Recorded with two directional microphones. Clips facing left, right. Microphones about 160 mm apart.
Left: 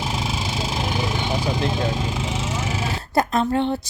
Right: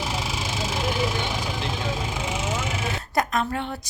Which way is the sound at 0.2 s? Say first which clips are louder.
Left 3 dB; 25° left (ahead or behind).